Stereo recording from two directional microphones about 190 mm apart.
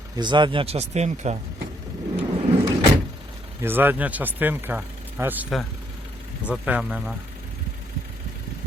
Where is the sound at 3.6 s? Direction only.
10° right (ahead or behind).